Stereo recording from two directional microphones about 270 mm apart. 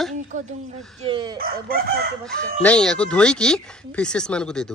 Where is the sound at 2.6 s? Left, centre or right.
Centre.